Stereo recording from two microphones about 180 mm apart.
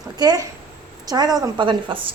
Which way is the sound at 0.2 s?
20° right (ahead or behind).